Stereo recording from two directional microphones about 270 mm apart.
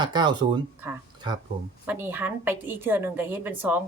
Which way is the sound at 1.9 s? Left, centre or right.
Centre.